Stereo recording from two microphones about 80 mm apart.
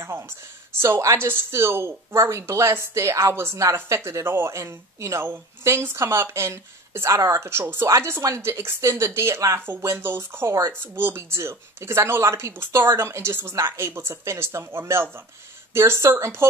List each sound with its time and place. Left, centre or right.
0.7 s speech: right